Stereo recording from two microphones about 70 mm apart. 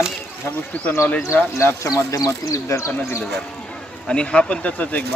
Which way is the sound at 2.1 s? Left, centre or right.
Left.